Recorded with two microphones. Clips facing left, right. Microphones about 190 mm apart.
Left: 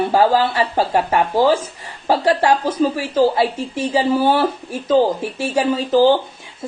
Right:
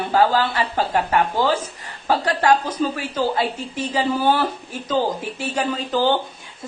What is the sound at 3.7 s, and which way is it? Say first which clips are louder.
Speech: left 6 dB; 10° left (ahead or behind).